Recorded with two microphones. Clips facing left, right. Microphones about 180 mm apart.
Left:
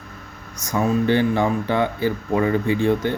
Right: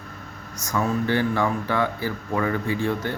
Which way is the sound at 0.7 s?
20° left (ahead or behind).